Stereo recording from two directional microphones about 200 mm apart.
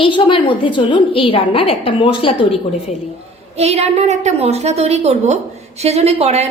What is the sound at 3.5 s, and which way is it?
A woman's voice, 30° right (ahead or behind).